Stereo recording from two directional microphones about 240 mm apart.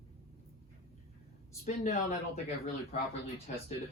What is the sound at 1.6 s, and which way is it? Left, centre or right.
Speech, left.